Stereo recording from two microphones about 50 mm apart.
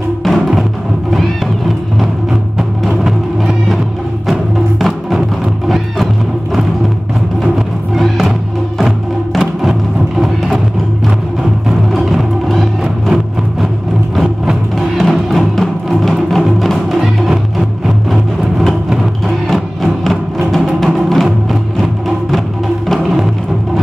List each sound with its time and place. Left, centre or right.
0.2 s music: centre
2.9 s music: centre
4.3 s music: centre
8.7 s music: centre
11.9 s music: centre
14.8 s music: centre